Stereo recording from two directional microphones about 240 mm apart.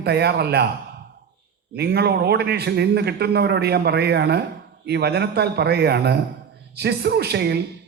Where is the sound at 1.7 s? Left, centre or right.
Right.